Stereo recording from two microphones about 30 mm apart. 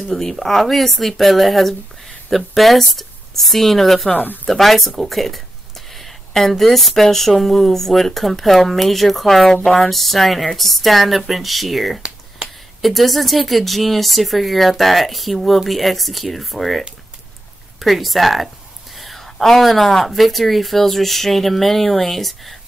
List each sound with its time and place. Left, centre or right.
0.1 s speech: centre
4.1 s speech: left
4.5 s speech: centre
18.9 s a sound: centre
19.4 s speech: centre